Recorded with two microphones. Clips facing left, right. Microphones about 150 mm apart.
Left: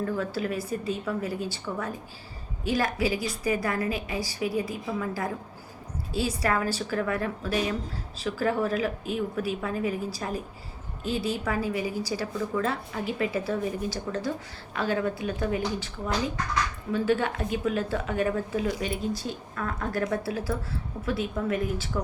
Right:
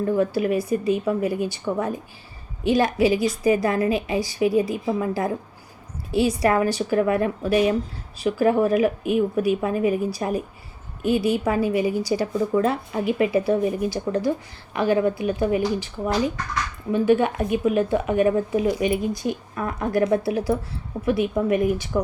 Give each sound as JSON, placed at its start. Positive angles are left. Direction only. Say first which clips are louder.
{"t": 0.0, "sound": "speech", "louder": "right 8 dB", "side_deg": -15}
{"t": 2.6, "sound": "a woman's voice", "louder": "right 8 dB", "side_deg": -20}
{"t": 16.9, "sound": "speech", "louder": "right 7 dB", "side_deg": -15}